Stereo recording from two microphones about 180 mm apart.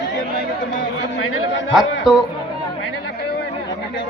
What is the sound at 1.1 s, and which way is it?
Chatter, 90° left.